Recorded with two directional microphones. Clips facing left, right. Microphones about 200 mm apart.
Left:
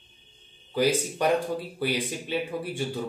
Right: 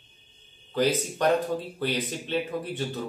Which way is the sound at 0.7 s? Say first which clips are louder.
Left 1 dB; 10° left (ahead or behind).